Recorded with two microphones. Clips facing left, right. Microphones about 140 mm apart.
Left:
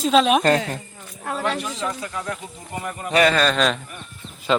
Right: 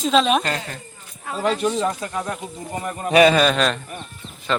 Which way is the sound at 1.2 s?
65° left (ahead or behind).